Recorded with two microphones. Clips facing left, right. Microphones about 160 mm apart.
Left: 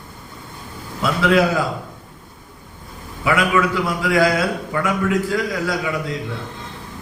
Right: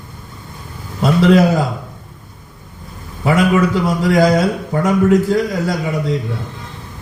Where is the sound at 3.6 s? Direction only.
45° right (ahead or behind).